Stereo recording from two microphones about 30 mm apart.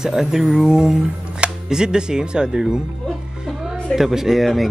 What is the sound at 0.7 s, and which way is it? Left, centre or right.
Speech, centre.